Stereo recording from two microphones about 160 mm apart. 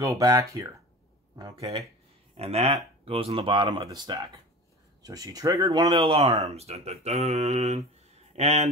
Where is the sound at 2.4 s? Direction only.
40° right (ahead or behind).